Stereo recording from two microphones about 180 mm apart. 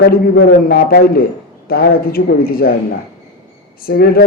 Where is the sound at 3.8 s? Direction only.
55° left (ahead or behind).